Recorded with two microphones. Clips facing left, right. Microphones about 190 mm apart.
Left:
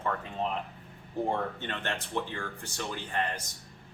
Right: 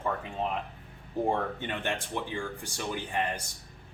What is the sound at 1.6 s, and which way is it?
Speech, 10° right (ahead or behind).